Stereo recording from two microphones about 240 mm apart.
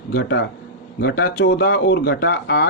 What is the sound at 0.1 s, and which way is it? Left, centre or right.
A man's voice, left.